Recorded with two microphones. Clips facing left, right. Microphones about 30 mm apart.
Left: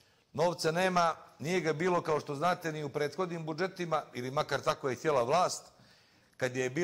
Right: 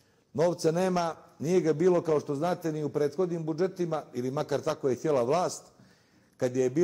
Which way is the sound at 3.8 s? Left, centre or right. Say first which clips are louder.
Right 1 dB; left.